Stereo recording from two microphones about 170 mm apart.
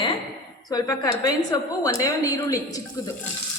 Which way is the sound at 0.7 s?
20° left (ahead or behind).